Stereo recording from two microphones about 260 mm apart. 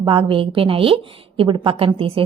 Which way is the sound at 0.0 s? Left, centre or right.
Centre.